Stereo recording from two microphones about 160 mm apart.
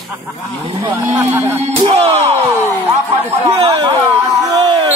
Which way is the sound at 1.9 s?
40° right (ahead or behind).